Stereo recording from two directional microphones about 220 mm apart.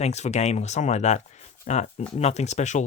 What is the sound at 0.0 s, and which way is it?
Speech, 30° left (ahead or behind).